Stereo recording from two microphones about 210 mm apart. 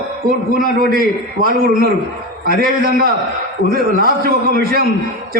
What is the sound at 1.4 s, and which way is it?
A man's voice, 45° right (ahead or behind).